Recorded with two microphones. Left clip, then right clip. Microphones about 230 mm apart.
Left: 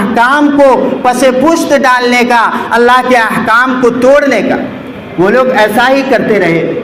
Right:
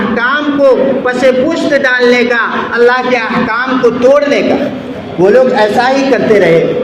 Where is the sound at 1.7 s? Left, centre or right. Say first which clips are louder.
Right 1 dB; left.